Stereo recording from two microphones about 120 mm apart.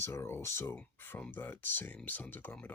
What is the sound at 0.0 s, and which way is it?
Speech, 20° left (ahead or behind).